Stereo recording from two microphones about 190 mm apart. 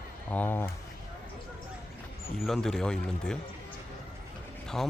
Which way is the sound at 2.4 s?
Centre (ahead or behind).